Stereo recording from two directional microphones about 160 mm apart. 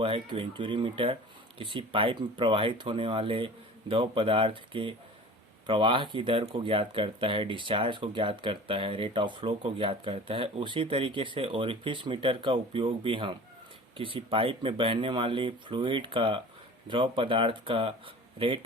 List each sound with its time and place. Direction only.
0.0 s speech: 35° right (ahead or behind)